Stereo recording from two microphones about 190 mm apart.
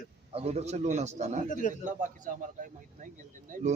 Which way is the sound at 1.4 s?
40° left (ahead or behind).